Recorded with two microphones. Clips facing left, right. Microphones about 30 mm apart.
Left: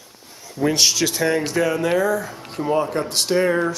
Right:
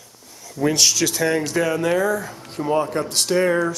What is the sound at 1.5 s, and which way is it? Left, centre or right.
Speech, centre.